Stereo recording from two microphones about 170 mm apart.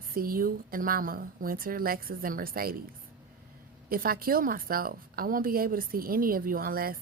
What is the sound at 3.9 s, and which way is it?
A woman's voice, 60° right (ahead or behind).